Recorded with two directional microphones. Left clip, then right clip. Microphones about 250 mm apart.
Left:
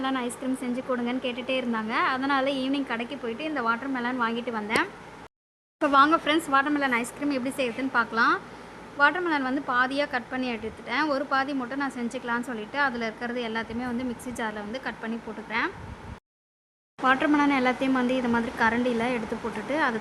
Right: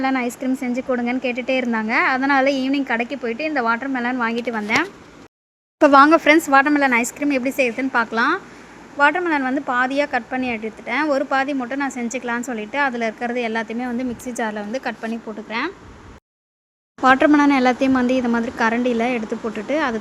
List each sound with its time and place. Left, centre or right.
0.0 s a woman's voice: centre
17.0 s a woman's voice: right